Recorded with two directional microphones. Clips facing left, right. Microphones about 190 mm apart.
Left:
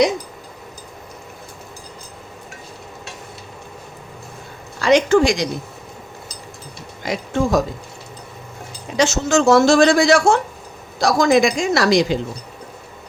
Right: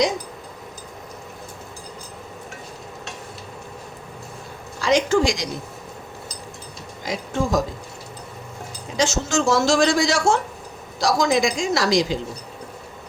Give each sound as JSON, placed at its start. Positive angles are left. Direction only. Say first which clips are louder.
{"t": 4.8, "sound": "a man's voice", "louder": "left 5 dB", "side_deg": 60}
{"t": 7.0, "sound": "speech", "louder": "left 4 dB", "side_deg": 65}
{"t": 9.0, "sound": "a man's voice", "louder": "left 5 dB", "side_deg": 65}